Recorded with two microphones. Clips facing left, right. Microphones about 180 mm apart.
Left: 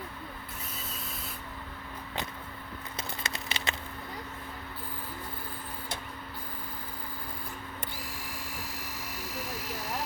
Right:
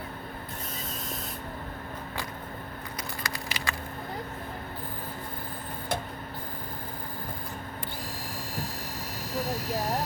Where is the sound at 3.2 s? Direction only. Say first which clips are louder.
Right 2 dB; 25° left (ahead or behind).